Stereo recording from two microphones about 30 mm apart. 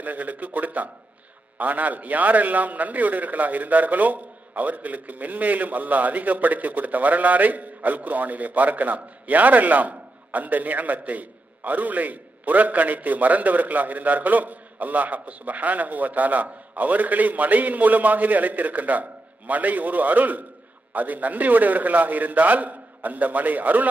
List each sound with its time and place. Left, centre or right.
0.0 s a man's voice: right